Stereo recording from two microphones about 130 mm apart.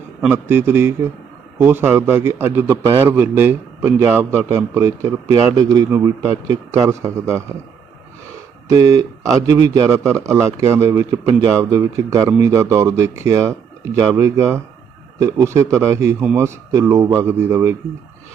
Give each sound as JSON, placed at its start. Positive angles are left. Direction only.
{"t": 0.3, "sound": "a man's voice", "side_deg": -20}
{"t": 8.7, "sound": "a man's voice", "side_deg": -25}